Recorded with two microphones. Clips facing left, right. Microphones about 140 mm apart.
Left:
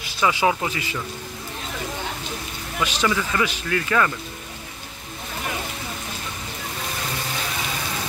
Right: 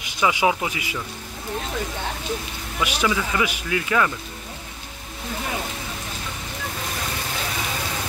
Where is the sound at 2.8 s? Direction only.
10° right (ahead or behind).